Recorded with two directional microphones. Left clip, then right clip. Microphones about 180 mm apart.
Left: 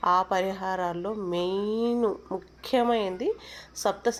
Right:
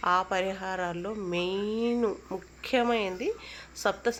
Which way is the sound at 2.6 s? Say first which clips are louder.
Left 2 dB; centre (ahead or behind).